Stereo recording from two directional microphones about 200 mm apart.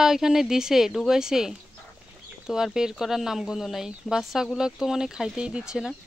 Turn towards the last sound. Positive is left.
turn(degrees=-5)  # may be behind; listen again after turning